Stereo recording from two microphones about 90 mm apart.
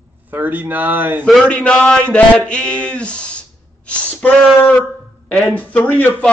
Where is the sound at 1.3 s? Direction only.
10° left (ahead or behind).